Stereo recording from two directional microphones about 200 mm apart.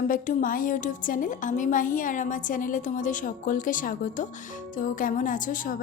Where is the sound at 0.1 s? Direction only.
40° left (ahead or behind).